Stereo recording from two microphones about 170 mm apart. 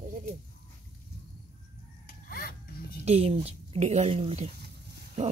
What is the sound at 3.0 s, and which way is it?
Speech, 35° right (ahead or behind).